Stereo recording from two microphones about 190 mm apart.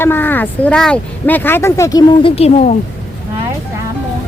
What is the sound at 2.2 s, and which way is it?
Speech, 35° left (ahead or behind).